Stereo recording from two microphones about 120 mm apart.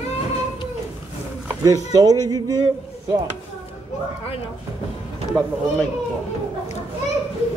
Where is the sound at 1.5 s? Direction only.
30° right (ahead or behind).